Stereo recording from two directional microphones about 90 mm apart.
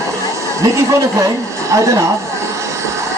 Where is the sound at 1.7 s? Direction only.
35° right (ahead or behind).